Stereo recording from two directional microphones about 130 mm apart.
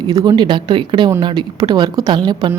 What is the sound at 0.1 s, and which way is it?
A woman's voice, 30° right (ahead or behind).